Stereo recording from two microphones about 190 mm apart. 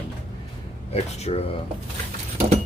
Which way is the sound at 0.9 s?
35° left (ahead or behind).